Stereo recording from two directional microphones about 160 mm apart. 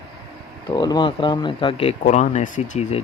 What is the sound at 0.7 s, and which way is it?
Speech, 25° left (ahead or behind).